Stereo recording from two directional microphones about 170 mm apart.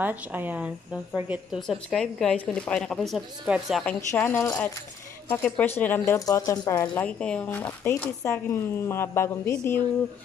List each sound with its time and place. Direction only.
0.0 s speech: 10° right (ahead or behind)
4.1 s speech: 15° left (ahead or behind)
6.9 s speech: 5° left (ahead or behind)